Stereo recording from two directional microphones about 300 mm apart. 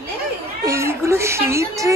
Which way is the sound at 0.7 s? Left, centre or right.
Centre.